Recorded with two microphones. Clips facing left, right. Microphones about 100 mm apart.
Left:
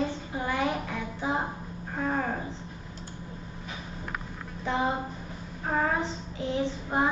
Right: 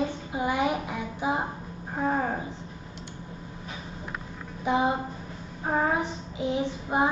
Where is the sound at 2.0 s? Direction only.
15° right (ahead or behind).